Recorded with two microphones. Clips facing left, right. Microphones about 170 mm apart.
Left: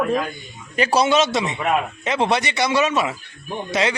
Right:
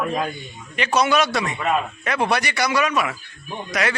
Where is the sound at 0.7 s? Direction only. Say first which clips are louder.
Left 2 dB; 35° left (ahead or behind).